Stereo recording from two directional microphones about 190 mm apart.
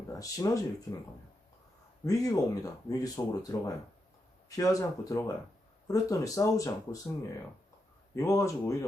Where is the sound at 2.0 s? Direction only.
20° left (ahead or behind).